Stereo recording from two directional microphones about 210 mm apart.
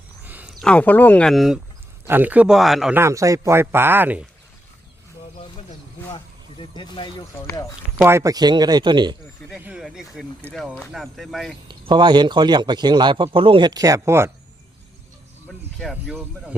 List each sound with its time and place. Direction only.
0.3 s a sound: 10° right (ahead or behind)
0.6 s speech: 5° left (ahead or behind)
3.0 s speech: 15° right (ahead or behind)
6.6 s speech: 25° left (ahead or behind)
8.0 s a man's voice: 15° right (ahead or behind)
9.5 s speech: 5° right (ahead or behind)
11.7 s a man's voice: 20° right (ahead or behind)
15.4 s speech: centre (ahead or behind)